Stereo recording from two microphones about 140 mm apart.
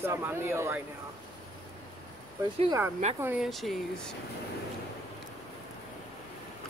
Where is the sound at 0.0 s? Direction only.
20° right (ahead or behind).